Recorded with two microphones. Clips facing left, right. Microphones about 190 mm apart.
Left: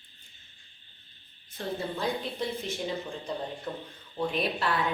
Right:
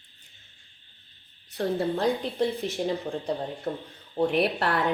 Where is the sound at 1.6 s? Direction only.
55° right (ahead or behind).